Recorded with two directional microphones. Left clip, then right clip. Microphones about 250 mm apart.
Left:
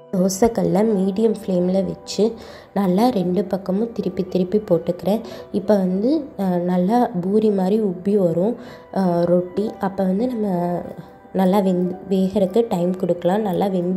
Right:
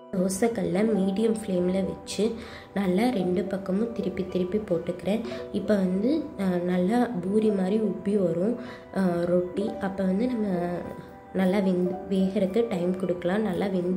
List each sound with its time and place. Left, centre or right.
0.2 s a woman's voice: left